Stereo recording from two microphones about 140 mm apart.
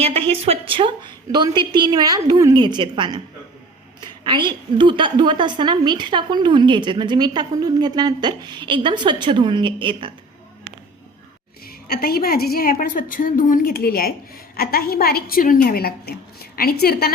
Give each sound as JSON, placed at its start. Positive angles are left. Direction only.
{"t": 0.0, "sound": "a woman's voice", "side_deg": -45}
{"t": 11.9, "sound": "a woman's voice", "side_deg": 90}